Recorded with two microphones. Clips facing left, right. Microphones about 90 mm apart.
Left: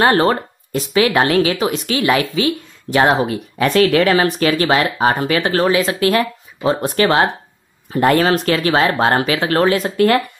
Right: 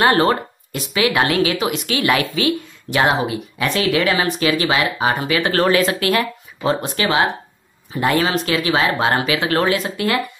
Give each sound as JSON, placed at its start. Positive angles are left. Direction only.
{"t": 0.0, "sound": "speech", "side_deg": 35}
{"t": 5.7, "sound": "speech", "side_deg": 20}